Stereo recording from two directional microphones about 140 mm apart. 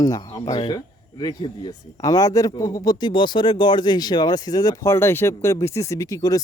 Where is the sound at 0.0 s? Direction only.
25° left (ahead or behind).